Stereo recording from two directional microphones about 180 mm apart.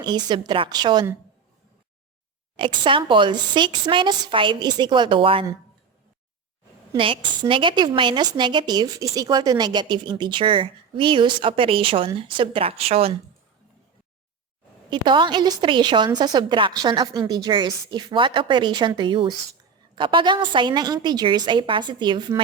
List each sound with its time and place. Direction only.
0.0 s a woman's voice: 25° right (ahead or behind)
2.6 s a woman's voice: 30° right (ahead or behind)
6.9 s a woman's voice: 30° right (ahead or behind)
14.8 s a woman's voice: 25° right (ahead or behind)